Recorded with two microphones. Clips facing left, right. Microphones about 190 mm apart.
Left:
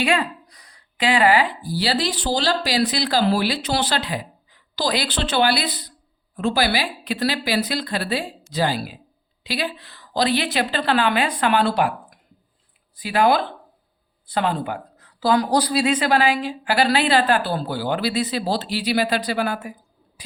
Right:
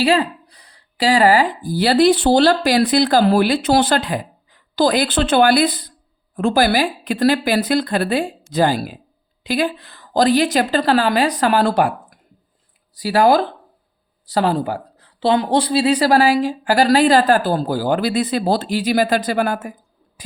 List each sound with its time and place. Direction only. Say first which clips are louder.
0.0 s speech: right 5 dB; 35° right (ahead or behind)